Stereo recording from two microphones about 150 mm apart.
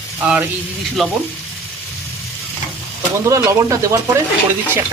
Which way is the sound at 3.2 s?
20° right (ahead or behind).